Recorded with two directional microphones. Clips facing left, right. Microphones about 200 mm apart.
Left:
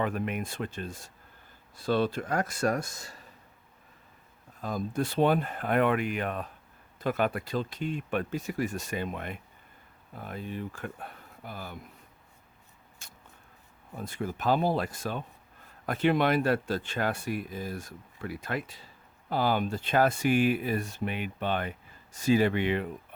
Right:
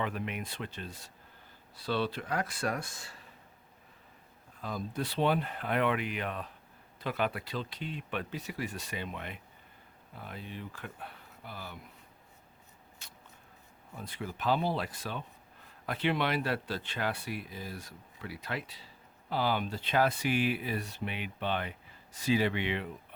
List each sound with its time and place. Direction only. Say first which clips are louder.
0.0 s speech: left 5 dB; 45° left (ahead or behind)
4.6 s speech: left 5 dB; 45° left (ahead or behind)
13.0 s vehicle: left 3 dB; 45° left (ahead or behind)
13.9 s speech: left 6 dB; 45° left (ahead or behind)